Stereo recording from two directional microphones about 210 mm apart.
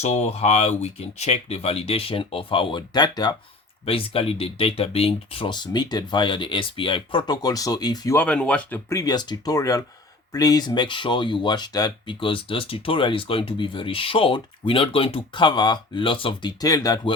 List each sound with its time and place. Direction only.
0.0 s speech: 30° left (ahead or behind)